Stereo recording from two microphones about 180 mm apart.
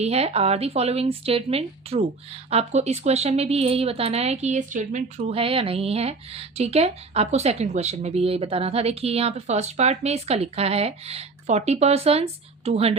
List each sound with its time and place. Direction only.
0.0 s speech: 35° right (ahead or behind)